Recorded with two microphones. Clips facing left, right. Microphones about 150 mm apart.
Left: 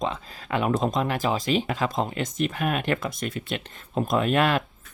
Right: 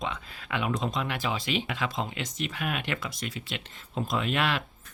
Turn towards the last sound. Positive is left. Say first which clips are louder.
# left 6 dB
turn(degrees=45)  # may be behind; listen again after turning